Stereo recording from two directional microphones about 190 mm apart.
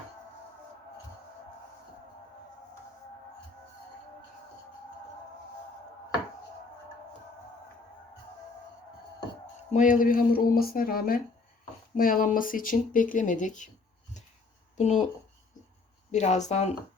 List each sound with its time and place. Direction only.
9.7 s speech: 45° left (ahead or behind)
14.8 s speech: 40° left (ahead or behind)
16.1 s speech: 35° left (ahead or behind)